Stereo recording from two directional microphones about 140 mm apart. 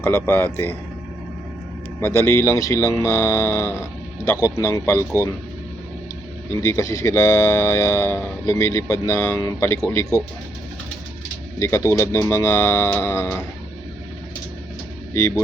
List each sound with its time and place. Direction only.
0.0 s speech: 15° left (ahead or behind)
2.0 s speech: 15° left (ahead or behind)
6.5 s speech: 20° left (ahead or behind)
11.6 s speech: 20° left (ahead or behind)